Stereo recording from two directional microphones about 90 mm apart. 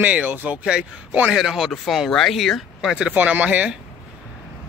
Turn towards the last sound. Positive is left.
turn(degrees=-15)  # may be behind; listen again after turning